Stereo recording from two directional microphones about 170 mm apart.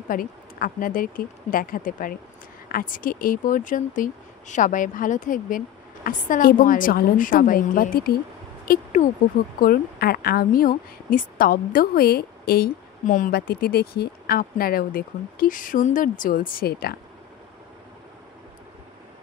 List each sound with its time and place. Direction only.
0.1 s a woman's voice: 55° left (ahead or behind)